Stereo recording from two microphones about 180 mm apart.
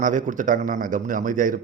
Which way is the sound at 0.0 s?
45° right (ahead or behind).